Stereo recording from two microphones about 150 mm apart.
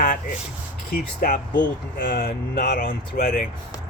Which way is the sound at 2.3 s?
90° left.